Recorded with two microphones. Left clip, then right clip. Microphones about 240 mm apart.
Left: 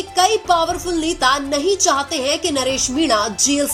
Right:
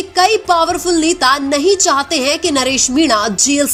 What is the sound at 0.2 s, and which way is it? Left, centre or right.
A woman's voice, right.